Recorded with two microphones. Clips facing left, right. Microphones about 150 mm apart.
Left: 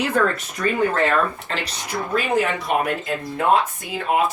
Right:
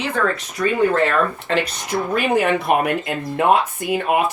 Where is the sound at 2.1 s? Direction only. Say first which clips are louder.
Right 3 dB; 60° right (ahead or behind).